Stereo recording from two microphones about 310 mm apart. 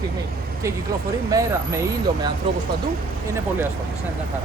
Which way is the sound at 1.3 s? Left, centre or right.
Centre.